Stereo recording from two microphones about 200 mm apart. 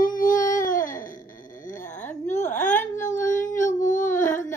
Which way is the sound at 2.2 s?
35° left (ahead or behind).